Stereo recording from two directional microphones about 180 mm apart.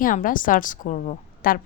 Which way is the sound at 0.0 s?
50° left (ahead or behind).